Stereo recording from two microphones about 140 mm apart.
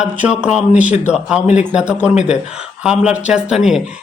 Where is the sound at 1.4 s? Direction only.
60° left (ahead or behind).